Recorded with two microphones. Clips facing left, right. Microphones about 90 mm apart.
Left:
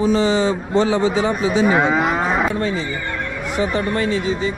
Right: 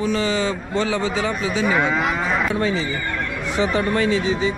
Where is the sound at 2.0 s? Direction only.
5° left (ahead or behind).